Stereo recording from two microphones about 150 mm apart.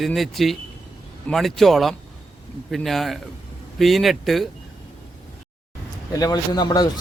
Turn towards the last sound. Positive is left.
turn(degrees=25)  # may be behind; listen again after turning